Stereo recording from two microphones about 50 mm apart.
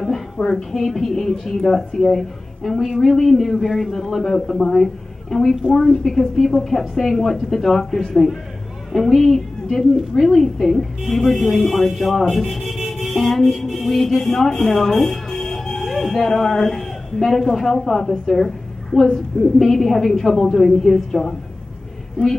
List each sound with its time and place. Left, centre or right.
0.0 s speech: centre
5.7 s a woman's voice: centre
6.0 s a man's voice: centre
15.5 s a sound: centre
16.2 s a man's voice: centre